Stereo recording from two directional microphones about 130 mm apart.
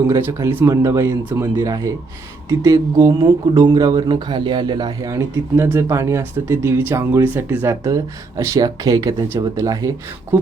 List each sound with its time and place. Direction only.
0.1 s speech: 20° right (ahead or behind)